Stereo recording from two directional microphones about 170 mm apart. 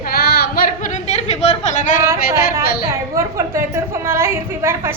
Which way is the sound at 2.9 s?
15° right (ahead or behind).